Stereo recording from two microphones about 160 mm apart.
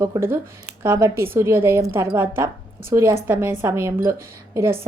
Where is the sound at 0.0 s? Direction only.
20° right (ahead or behind).